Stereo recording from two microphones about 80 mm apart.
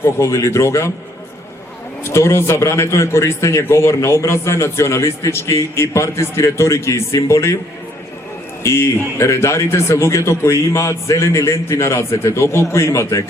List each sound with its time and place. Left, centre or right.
0.0 s a man's voice: left
2.0 s a man's voice: left
8.6 s a man's voice: left